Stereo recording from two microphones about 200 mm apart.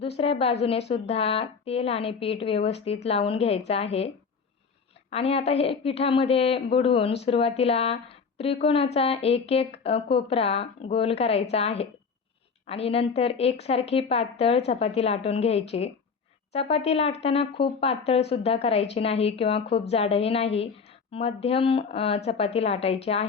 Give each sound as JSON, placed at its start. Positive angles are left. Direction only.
{"t": 0.0, "sound": "a woman's voice", "side_deg": 30}
{"t": 5.1, "sound": "a woman's voice", "side_deg": 30}